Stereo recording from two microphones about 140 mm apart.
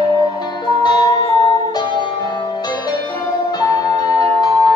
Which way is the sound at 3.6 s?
25° left (ahead or behind).